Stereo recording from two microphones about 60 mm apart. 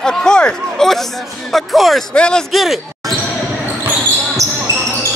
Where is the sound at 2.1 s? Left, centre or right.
Centre.